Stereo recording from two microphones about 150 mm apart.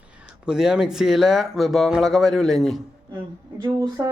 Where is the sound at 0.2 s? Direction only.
5° right (ahead or behind).